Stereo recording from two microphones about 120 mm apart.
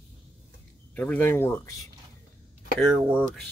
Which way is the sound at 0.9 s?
15° left (ahead or behind).